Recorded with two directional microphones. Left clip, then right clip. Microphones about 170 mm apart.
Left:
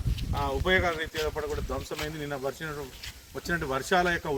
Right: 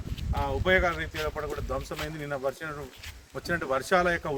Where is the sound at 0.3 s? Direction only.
20° right (ahead or behind).